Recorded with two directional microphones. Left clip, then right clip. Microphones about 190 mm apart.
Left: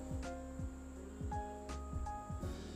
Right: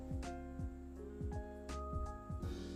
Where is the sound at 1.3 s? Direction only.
Centre (ahead or behind).